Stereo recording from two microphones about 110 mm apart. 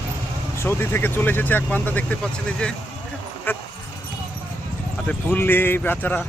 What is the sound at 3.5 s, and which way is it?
Speech, 20° left (ahead or behind).